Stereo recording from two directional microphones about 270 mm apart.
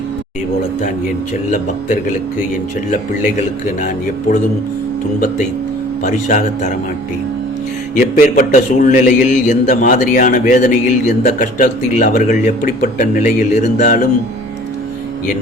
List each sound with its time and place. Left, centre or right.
1.5 s a man's voice: left
6.0 s a man's voice: left
8.2 s a man's voice: left